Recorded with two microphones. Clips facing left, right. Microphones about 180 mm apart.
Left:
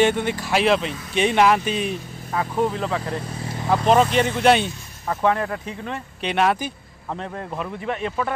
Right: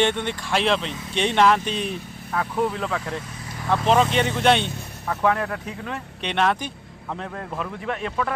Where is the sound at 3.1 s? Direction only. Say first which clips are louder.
Left 4 dB; 30° left (ahead or behind).